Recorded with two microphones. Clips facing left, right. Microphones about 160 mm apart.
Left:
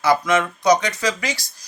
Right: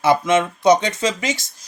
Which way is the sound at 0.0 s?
25° right (ahead or behind).